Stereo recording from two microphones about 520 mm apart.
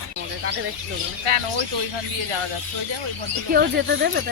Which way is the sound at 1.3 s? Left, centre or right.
Right.